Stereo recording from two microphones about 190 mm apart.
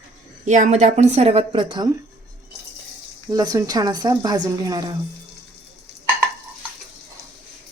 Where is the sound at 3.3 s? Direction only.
20° right (ahead or behind).